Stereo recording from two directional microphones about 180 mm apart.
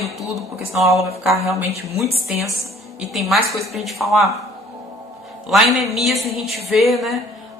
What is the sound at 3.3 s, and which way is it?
A woman's voice, centre (ahead or behind).